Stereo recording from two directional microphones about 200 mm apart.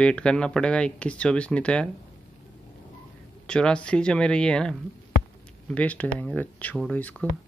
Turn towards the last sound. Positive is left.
turn(degrees=5)  # may be behind; listen again after turning